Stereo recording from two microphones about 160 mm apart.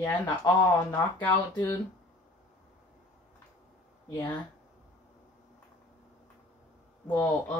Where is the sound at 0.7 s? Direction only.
15° left (ahead or behind).